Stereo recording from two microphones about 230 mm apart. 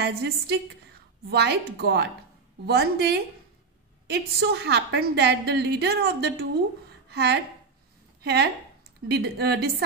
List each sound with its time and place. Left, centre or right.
0.0 s a woman's voice: right